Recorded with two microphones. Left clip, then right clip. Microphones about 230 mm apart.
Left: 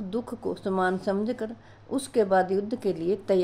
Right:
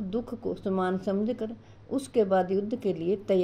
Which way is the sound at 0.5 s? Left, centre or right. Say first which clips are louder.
Left 3 dB; centre.